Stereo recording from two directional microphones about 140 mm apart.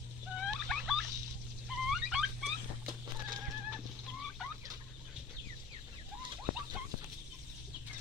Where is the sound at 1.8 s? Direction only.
5° right (ahead or behind).